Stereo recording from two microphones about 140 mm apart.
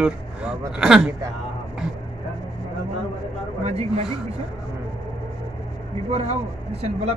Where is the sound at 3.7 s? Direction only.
50° right (ahead or behind).